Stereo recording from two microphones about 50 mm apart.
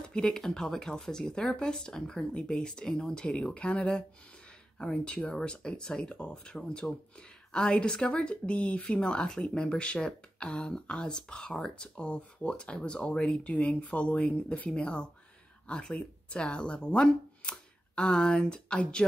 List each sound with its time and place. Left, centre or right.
0.1 s speech: centre